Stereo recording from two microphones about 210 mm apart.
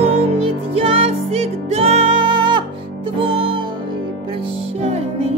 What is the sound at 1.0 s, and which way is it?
Music, 30° right (ahead or behind).